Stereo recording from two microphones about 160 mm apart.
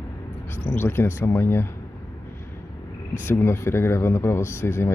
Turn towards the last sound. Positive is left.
turn(degrees=15)  # may be behind; listen again after turning